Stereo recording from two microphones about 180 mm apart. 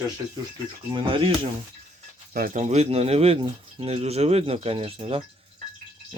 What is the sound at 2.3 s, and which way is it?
Speech, 55° right (ahead or behind).